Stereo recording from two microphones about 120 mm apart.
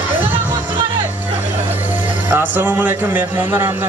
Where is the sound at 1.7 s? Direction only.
15° right (ahead or behind).